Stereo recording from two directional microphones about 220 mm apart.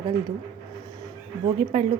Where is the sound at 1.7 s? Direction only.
25° right (ahead or behind).